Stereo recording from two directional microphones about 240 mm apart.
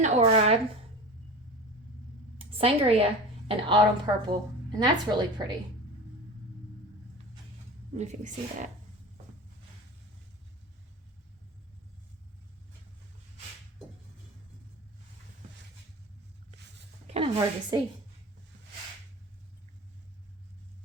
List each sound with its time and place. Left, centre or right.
0.0 s a woman's voice: right
2.4 s a woman's voice: right
7.9 s a woman's voice: right
17.1 s a woman's voice: right